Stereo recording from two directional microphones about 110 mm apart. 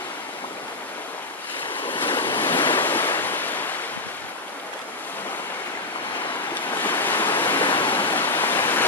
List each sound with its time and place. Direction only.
2.0 s waves: 50° left (ahead or behind)
2.7 s waves: 20° left (ahead or behind)
6.5 s waves: 15° left (ahead or behind)
7.6 s waves: 50° left (ahead or behind)
8.1 s waterfall: 20° left (ahead or behind)